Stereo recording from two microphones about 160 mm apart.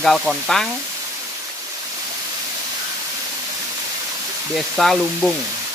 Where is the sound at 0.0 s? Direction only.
Centre (ahead or behind).